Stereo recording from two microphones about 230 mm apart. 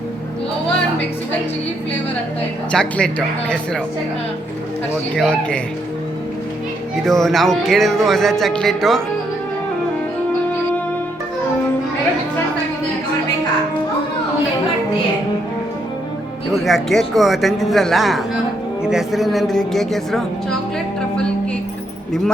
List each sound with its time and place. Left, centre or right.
2.7 s music: centre
5.1 s music: centre
7.0 s music: centre
16.6 s music: centre